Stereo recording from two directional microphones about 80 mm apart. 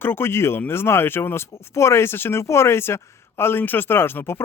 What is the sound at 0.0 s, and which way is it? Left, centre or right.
Speech, left.